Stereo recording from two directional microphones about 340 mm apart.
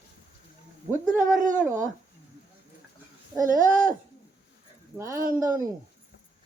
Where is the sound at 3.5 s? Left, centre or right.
Right.